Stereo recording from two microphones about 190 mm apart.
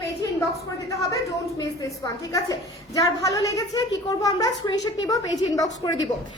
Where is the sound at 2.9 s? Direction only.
20° left (ahead or behind).